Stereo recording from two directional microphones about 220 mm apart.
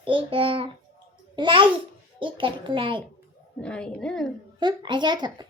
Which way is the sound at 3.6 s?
5° left (ahead or behind).